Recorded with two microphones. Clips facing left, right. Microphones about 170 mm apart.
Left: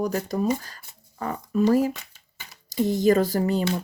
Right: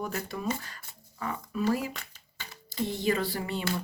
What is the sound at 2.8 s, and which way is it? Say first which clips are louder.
Speech: left 9 dB; 40° left (ahead or behind).